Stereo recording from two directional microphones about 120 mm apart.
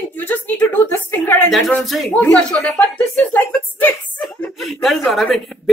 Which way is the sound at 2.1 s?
10° left (ahead or behind).